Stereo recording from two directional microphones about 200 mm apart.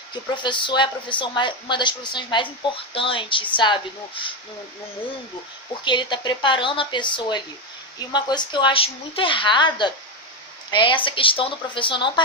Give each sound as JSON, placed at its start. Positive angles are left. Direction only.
{"t": 0.1, "sound": "speech", "side_deg": 25}
{"t": 5.8, "sound": "speech", "side_deg": 25}